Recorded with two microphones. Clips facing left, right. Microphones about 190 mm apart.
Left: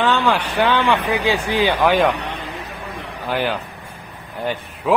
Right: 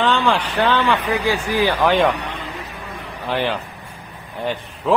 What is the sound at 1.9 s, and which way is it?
Speech, centre (ahead or behind).